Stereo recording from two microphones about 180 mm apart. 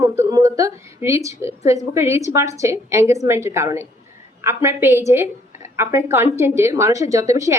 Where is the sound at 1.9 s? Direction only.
15° right (ahead or behind).